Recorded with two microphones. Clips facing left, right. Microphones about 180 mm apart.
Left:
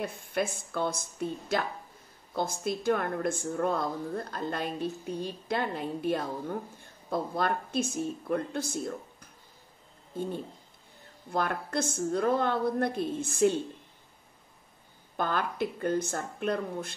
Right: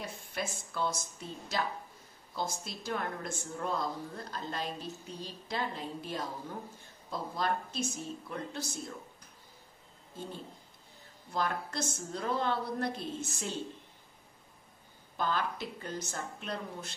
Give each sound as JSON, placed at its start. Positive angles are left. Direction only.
{"t": 0.0, "sound": "a woman's voice", "side_deg": 55}
{"t": 11.3, "sound": "a woman's voice", "side_deg": 55}
{"t": 15.1, "sound": "a woman's voice", "side_deg": 55}